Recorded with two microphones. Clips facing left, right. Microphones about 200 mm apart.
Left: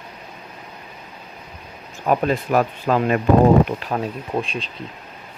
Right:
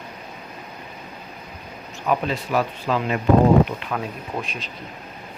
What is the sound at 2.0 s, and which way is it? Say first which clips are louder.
Speech: left 4 dB; 50° left (ahead or behind).